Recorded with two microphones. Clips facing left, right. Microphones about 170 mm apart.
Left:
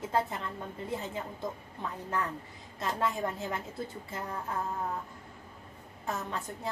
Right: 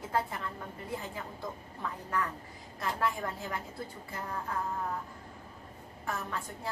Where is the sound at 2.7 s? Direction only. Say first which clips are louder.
Left 1 dB; 20° left (ahead or behind).